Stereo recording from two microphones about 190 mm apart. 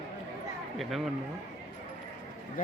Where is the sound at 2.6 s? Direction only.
45° left (ahead or behind).